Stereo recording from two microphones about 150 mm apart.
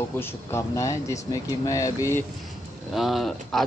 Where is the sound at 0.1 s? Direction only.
15° left (ahead or behind).